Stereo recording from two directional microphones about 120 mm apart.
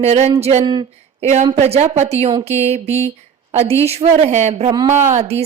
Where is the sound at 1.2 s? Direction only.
70° right (ahead or behind).